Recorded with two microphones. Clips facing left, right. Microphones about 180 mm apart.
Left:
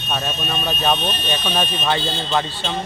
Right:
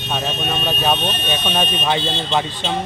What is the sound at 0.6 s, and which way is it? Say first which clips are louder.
Speech: even; 10° right (ahead or behind).